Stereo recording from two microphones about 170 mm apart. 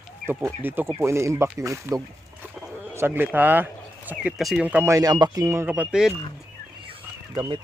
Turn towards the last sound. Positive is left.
turn(degrees=-25)  # may be behind; listen again after turning